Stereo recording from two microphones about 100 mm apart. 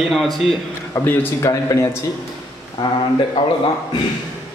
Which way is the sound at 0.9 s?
35° left (ahead or behind).